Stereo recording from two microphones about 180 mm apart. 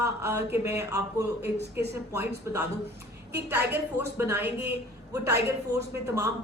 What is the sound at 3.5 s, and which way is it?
Speech, 10° right (ahead or behind).